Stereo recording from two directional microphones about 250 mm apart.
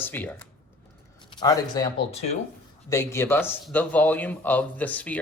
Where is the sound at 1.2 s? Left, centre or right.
Centre.